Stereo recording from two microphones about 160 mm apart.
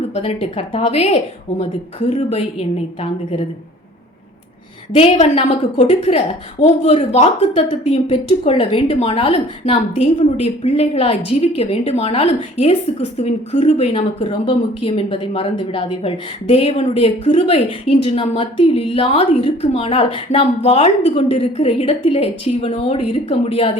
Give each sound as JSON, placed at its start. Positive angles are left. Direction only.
{"t": 0.1, "sound": "a woman's voice", "side_deg": 40}
{"t": 4.9, "sound": "a woman's voice", "side_deg": 40}